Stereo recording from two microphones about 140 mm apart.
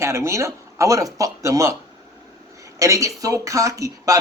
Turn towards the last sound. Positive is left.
turn(degrees=-25)  # may be behind; listen again after turning